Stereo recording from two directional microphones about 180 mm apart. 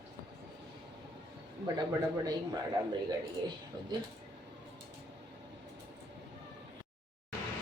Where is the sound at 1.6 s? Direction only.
20° right (ahead or behind).